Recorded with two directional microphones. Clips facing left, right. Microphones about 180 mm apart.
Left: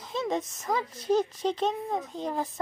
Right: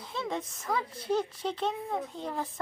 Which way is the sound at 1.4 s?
20° left (ahead or behind).